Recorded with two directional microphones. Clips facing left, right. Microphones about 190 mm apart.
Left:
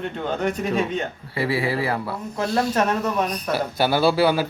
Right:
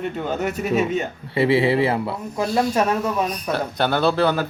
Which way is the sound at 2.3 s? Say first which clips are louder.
Right 1 dB; 10° right (ahead or behind).